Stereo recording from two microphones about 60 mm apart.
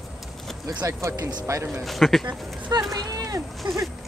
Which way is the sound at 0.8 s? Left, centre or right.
Right.